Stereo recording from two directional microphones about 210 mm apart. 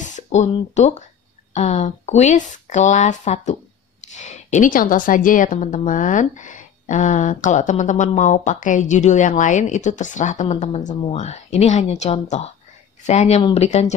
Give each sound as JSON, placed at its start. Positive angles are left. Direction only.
{"t": 0.0, "sound": "a woman's voice", "side_deg": 35}